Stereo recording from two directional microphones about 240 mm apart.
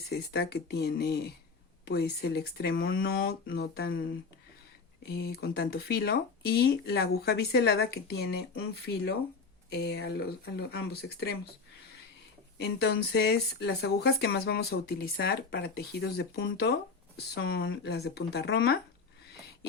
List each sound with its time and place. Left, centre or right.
0.1 s speech: left
5.0 s speech: left
9.6 s speech: left
12.5 s speech: left